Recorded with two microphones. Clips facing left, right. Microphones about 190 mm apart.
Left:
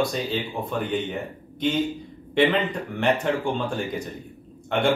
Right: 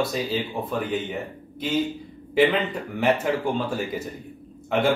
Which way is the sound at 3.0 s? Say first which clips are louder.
Right 1 dB; 5° right (ahead or behind).